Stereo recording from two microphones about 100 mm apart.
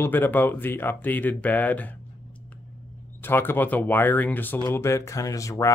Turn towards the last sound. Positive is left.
turn(degrees=35)  # may be behind; listen again after turning